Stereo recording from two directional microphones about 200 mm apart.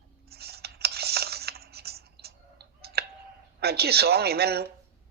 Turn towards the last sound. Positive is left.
turn(degrees=-55)  # may be behind; listen again after turning